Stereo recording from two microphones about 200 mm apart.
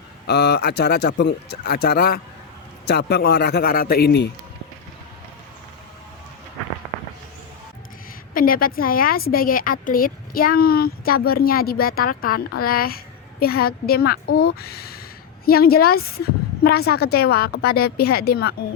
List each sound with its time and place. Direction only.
0.3 s a woman's voice: 55° left (ahead or behind)
8.3 s a woman's voice: 45° left (ahead or behind)